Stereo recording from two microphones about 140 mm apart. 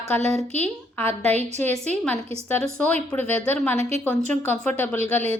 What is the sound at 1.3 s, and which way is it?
Speech, 50° right (ahead or behind).